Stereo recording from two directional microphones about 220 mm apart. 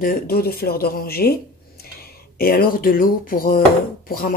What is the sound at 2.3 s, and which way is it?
Speech, 40° left (ahead or behind).